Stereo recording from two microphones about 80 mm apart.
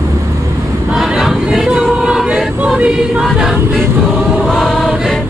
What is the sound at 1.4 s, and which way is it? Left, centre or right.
Choir, centre.